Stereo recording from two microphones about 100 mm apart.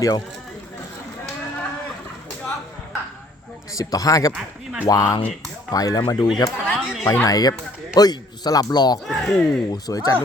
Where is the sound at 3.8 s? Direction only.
35° left (ahead or behind).